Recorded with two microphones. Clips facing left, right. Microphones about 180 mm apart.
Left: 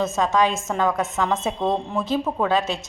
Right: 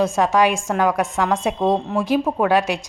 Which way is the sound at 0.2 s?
15° right (ahead or behind).